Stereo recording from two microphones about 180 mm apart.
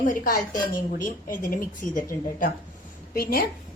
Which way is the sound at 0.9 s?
50° left (ahead or behind).